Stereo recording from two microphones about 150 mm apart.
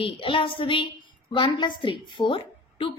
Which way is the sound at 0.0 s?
35° left (ahead or behind).